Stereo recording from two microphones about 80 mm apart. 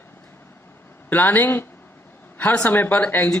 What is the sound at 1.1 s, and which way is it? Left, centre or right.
Speech, left.